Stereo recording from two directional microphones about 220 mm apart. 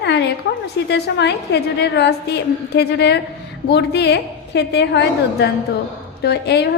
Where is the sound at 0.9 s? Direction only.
50° left (ahead or behind).